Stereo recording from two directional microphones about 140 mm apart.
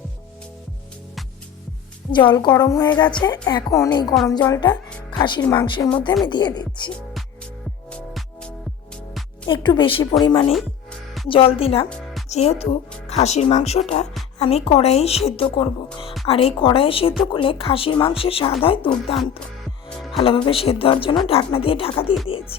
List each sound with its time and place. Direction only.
2.0 s speech: 35° left (ahead or behind)
6.9 s music: centre (ahead or behind)
9.5 s a woman's voice: 35° left (ahead or behind)